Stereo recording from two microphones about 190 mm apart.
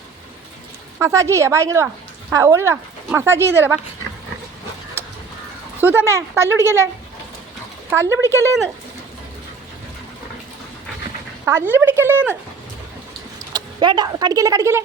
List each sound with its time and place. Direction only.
0.9 s speech: 15° right (ahead or behind)
5.8 s speech: 10° right (ahead or behind)
7.9 s speech: 15° right (ahead or behind)
11.4 s speech: 10° right (ahead or behind)
13.5 s speech: 20° right (ahead or behind)